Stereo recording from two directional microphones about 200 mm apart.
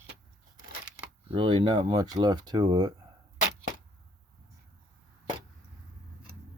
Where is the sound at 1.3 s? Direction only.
25° right (ahead or behind).